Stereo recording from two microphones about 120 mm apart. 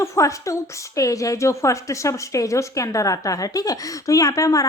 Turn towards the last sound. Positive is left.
turn(degrees=30)  # may be behind; listen again after turning